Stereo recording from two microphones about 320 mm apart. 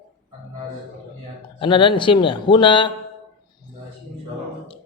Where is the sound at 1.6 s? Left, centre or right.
Centre.